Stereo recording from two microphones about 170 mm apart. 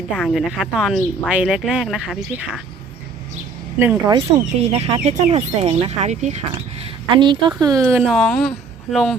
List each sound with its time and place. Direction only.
0.2 s speech: centre (ahead or behind)
3.8 s speech: 15° right (ahead or behind)
4.3 s speech: 40° right (ahead or behind)
7.2 s speech: 25° right (ahead or behind)
7.8 s speech: centre (ahead or behind)